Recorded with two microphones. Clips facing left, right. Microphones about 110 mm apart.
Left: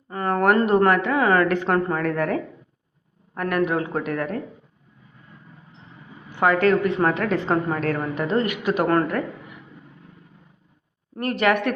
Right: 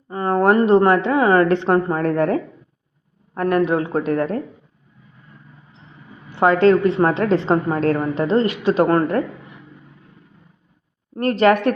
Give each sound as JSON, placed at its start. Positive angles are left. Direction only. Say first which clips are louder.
{"t": 0.1, "sound": "speech", "louder": "right 3 dB", "side_deg": -25}
{"t": 6.3, "sound": "a woman's voice", "louder": "right 5 dB", "side_deg": -30}
{"t": 11.1, "sound": "a woman's voice", "louder": "right 6 dB", "side_deg": -35}